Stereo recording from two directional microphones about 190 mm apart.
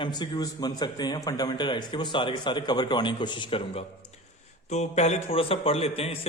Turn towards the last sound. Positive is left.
turn(degrees=30)  # may be behind; listen again after turning